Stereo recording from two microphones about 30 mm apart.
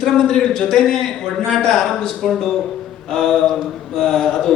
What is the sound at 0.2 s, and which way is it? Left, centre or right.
A man's voice, left.